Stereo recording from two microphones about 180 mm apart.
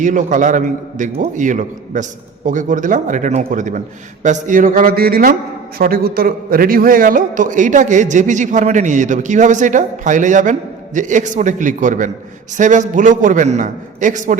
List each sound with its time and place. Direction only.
0.0 s a man's voice: 45° right (ahead or behind)